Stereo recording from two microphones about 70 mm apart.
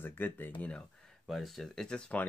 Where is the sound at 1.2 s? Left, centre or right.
Centre.